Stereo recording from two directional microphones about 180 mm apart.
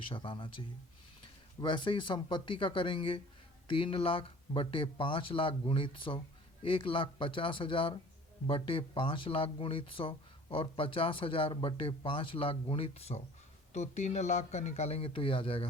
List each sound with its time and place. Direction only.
0.1 s speech: 30° left (ahead or behind)
1.6 s a man's voice: 25° left (ahead or behind)